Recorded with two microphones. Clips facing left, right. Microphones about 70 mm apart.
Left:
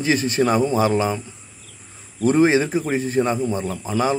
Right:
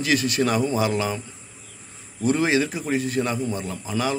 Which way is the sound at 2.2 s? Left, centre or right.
Left.